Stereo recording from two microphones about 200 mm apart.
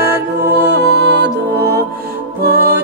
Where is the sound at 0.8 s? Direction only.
55° right (ahead or behind).